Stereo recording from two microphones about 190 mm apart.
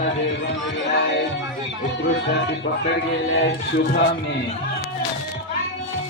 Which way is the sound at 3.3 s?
90° left.